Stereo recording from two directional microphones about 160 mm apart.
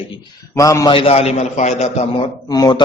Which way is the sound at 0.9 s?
35° left (ahead or behind).